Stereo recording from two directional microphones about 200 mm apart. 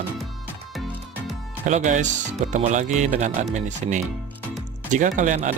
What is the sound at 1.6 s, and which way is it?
Speech, 40° right (ahead or behind).